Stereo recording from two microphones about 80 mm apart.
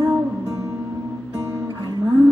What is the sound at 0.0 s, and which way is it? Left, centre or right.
Music, right.